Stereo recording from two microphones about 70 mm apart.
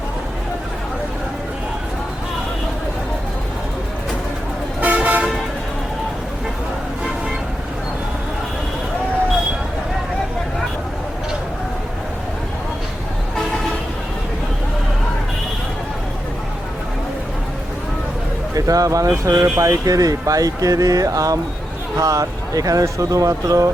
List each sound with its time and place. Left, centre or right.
4.8 s toot: right
18.5 s speech: right